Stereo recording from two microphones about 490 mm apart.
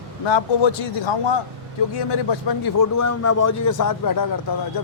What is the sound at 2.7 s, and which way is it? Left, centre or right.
A man's voice, left.